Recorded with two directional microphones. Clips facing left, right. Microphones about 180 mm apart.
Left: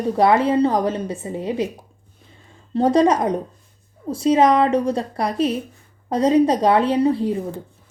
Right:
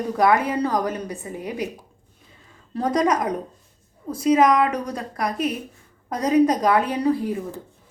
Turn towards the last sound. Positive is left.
turn(degrees=25)  # may be behind; listen again after turning